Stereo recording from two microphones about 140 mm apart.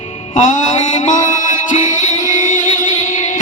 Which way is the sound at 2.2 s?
60° left (ahead or behind).